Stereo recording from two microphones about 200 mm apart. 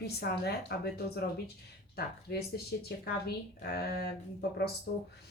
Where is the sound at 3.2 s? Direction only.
50° left (ahead or behind).